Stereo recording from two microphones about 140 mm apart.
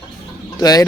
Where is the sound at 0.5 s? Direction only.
25° left (ahead or behind).